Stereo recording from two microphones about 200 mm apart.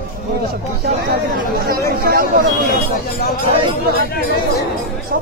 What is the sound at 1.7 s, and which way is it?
Speech, 45° right (ahead or behind).